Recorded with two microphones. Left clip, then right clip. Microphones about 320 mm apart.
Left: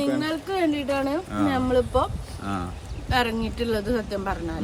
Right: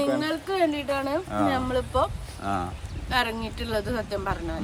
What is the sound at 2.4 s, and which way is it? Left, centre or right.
Speech, centre.